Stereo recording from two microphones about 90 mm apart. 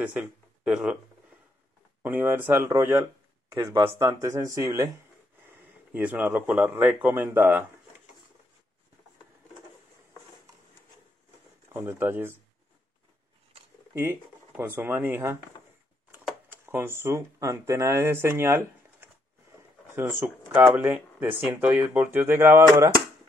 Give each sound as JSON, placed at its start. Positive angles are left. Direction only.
{"t": 0.0, "sound": "speech", "side_deg": -15}
{"t": 2.0, "sound": "speech", "side_deg": -20}
{"t": 5.9, "sound": "speech", "side_deg": -15}
{"t": 11.7, "sound": "speech", "side_deg": -25}
{"t": 14.6, "sound": "speech", "side_deg": -20}
{"t": 16.4, "sound": "speech", "side_deg": -25}